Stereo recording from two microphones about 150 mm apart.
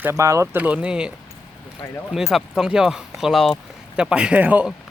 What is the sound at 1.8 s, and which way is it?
Speech, 15° left (ahead or behind).